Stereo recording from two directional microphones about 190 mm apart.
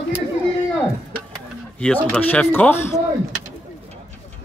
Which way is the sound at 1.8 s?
5° left (ahead or behind).